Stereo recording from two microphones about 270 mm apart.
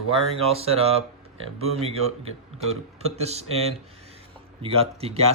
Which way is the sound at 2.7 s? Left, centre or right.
Right.